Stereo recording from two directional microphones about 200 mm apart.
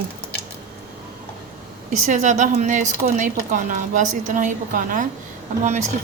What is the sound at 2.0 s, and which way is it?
A woman's voice, 35° right (ahead or behind).